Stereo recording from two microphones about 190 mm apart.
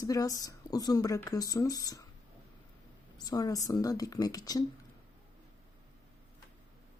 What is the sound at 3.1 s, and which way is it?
Speech, 20° left (ahead or behind).